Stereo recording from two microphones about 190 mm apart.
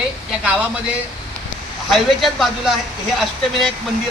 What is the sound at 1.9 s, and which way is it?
Speech, centre (ahead or behind).